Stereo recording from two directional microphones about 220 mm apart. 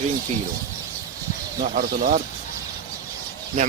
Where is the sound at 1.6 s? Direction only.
40° right (ahead or behind).